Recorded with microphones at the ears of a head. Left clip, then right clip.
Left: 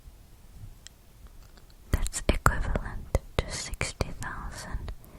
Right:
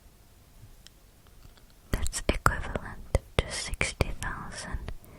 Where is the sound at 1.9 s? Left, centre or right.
Centre.